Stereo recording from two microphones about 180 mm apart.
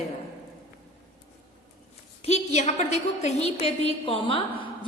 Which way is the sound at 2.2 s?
40° left (ahead or behind).